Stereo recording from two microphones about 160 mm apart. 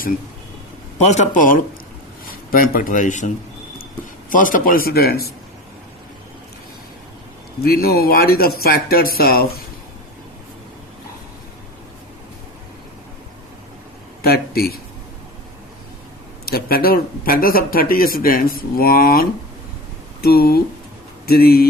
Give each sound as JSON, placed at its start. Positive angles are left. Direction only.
{"t": 0.9, "sound": "speech", "side_deg": 45}
{"t": 4.3, "sound": "speech", "side_deg": 55}
{"t": 7.6, "sound": "speech", "side_deg": 70}
{"t": 14.2, "sound": "speech", "side_deg": 75}
{"t": 16.5, "sound": "speech", "side_deg": 70}